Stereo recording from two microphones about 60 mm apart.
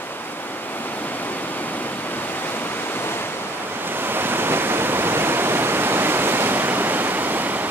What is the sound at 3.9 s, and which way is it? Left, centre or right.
Waves, right.